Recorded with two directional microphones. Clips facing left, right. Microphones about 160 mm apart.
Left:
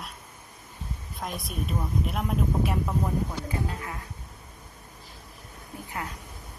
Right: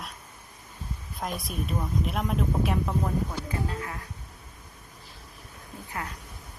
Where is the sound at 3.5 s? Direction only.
25° left (ahead or behind).